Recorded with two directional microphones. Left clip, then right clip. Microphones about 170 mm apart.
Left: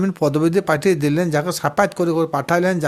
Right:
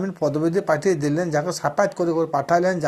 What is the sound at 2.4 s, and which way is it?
Speech, 65° left (ahead or behind).